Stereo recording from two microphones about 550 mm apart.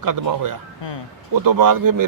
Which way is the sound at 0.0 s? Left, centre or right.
Right.